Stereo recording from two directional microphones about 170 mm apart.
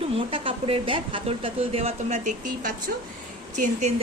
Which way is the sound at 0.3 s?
30° right (ahead or behind).